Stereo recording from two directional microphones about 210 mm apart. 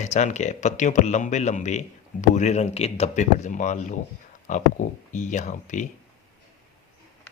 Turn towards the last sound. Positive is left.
turn(degrees=35)  # may be behind; listen again after turning